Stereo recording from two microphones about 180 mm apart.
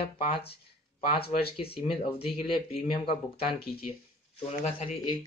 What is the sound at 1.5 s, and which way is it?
Speech, 30° left (ahead or behind).